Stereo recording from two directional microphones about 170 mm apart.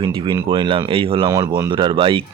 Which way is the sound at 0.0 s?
30° right (ahead or behind).